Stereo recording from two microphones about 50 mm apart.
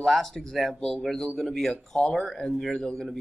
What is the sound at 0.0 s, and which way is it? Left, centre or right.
A man's voice, centre.